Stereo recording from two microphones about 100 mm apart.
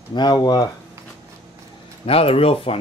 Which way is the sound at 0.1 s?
45° left (ahead or behind).